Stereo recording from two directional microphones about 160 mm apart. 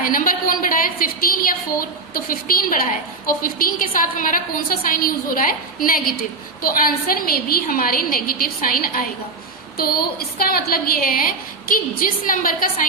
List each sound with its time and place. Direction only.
0.0 s a woman's voice: 60° left (ahead or behind)